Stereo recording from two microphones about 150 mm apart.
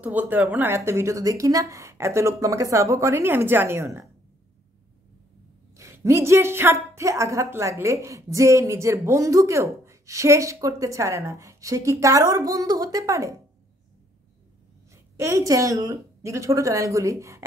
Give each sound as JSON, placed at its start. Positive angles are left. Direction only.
{"t": 0.0, "sound": "a woman's voice", "side_deg": -10}
{"t": 5.8, "sound": "a woman's voice", "side_deg": -20}
{"t": 15.1, "sound": "a woman's voice", "side_deg": -20}